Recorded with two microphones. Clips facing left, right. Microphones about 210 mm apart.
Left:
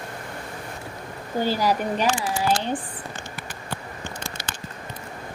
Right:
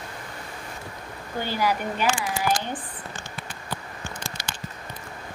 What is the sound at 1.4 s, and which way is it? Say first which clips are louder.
Speech: left 3 dB; 40° left (ahead or behind).